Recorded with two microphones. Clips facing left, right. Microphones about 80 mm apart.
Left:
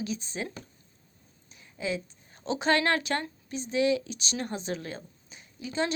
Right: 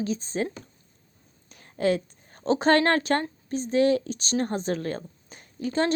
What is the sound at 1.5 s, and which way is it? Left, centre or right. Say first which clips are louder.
A woman's voice: right 8 dB; right.